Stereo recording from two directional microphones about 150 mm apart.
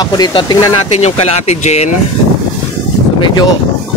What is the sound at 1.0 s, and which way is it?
Speech, 45° left (ahead or behind).